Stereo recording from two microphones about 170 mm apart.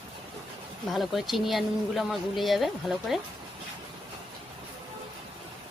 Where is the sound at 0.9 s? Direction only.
Centre (ahead or behind).